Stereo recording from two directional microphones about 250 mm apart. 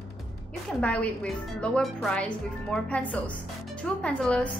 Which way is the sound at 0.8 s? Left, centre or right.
Centre.